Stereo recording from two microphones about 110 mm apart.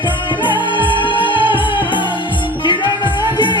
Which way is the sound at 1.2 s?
50° left (ahead or behind).